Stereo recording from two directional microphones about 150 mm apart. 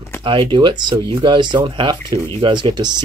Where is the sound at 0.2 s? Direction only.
35° right (ahead or behind).